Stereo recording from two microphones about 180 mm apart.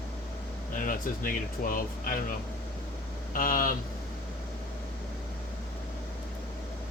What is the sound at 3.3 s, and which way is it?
Speech, 50° left (ahead or behind).